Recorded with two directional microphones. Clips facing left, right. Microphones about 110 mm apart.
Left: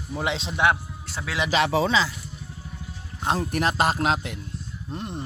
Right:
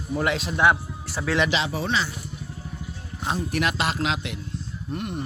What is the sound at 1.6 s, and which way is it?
Speech, 90° left.